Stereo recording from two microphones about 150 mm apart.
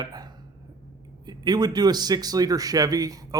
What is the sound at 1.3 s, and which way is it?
Speech, 30° right (ahead or behind).